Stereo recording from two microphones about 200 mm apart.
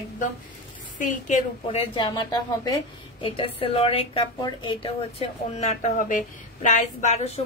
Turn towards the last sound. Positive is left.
turn(degrees=35)  # may be behind; listen again after turning